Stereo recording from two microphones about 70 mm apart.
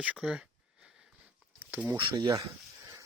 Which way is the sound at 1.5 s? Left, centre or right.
Right.